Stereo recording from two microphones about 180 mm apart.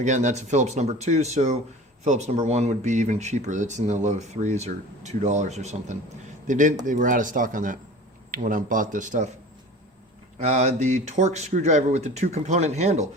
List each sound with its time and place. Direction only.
0.0 s speech: 40° right (ahead or behind)
10.3 s speech: 40° right (ahead or behind)